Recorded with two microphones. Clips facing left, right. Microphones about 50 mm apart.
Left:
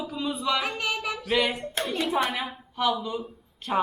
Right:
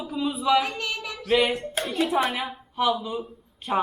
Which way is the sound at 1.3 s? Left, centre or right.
Centre.